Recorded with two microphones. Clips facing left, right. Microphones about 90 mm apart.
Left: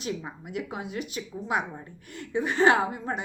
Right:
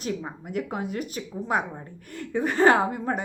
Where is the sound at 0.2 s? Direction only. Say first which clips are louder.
Right 4 dB; 45° right (ahead or behind).